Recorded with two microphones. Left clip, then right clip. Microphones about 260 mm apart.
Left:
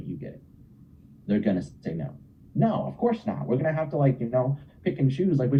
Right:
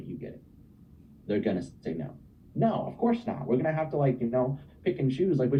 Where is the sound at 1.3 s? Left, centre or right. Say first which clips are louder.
Left 2 dB; left.